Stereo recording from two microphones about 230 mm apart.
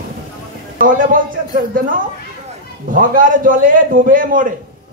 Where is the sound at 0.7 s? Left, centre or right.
Right.